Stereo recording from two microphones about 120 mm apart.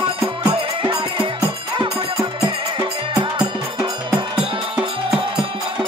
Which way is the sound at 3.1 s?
45° right (ahead or behind).